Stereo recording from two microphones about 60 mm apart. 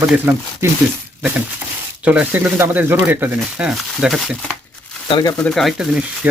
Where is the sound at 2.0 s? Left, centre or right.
Right.